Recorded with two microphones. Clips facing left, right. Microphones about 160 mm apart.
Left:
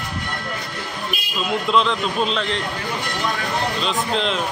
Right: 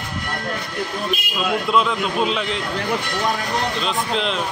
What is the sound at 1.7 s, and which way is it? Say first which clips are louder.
Speech: left 1 dB; 5° right (ahead or behind).